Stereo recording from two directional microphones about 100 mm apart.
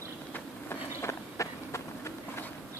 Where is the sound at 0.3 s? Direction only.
25° left (ahead or behind).